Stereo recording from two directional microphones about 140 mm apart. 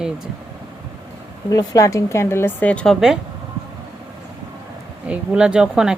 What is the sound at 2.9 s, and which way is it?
Speech, 5° right (ahead or behind).